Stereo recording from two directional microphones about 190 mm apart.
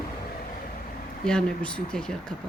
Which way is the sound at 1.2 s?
5° left (ahead or behind).